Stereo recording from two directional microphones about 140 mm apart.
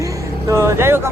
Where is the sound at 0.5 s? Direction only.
20° right (ahead or behind).